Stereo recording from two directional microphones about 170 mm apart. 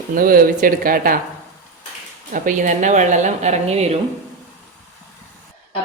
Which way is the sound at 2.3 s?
50° right (ahead or behind).